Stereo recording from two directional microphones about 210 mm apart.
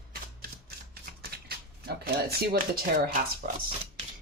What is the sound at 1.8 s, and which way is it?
Speech, 50° right (ahead or behind).